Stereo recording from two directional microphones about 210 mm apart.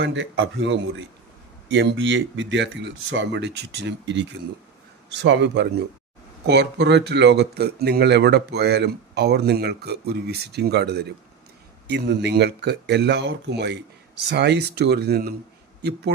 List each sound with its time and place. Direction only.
0.0 s speech: 60° right (ahead or behind)